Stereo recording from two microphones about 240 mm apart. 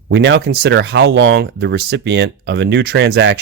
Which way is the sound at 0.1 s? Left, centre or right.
Right.